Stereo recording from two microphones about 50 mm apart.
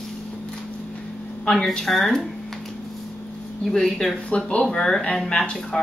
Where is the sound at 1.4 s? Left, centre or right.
Centre.